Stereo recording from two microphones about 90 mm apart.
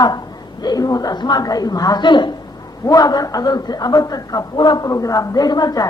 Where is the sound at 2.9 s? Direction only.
45° left (ahead or behind).